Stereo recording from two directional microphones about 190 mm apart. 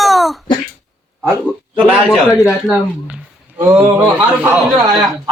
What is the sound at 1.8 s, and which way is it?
A man's voice, 5° right (ahead or behind).